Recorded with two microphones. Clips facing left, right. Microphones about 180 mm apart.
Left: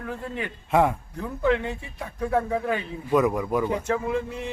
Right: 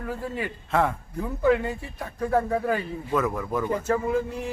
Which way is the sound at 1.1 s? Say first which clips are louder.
Right 2 dB; 5° right (ahead or behind).